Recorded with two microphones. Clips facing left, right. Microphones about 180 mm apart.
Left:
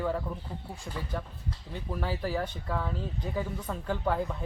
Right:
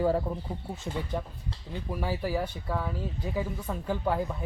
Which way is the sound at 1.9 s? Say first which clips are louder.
Right 1 dB; 10° right (ahead or behind).